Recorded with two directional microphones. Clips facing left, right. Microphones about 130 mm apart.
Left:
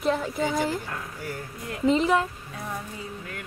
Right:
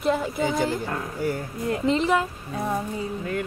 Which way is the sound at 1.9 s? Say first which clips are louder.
Left 1 dB; centre (ahead or behind).